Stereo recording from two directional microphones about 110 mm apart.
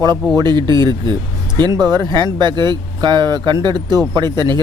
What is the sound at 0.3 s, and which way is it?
Speech, 40° right (ahead or behind).